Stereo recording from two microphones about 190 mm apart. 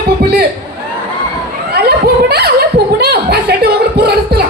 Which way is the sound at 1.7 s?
55° right (ahead or behind).